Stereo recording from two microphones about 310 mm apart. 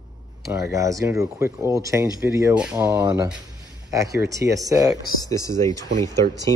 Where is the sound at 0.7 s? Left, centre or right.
Centre.